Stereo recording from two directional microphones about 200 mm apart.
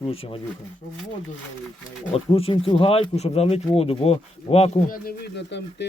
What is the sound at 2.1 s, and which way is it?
Speech, 30° left (ahead or behind).